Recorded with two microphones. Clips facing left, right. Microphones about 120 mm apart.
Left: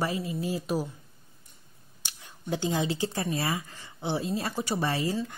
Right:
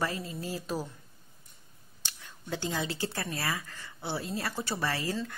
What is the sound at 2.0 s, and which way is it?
Speech, 15° left (ahead or behind).